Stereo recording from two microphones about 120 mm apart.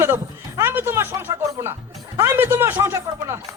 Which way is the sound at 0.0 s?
20° right (ahead or behind).